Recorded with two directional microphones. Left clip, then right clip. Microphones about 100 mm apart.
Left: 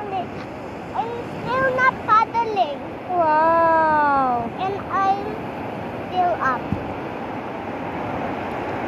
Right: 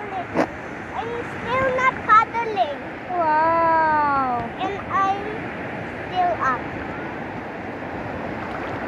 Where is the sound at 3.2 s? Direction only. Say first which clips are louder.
Left 1 dB; 40° left (ahead or behind).